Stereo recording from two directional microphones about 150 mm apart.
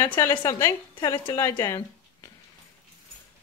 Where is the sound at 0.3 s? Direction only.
30° left (ahead or behind).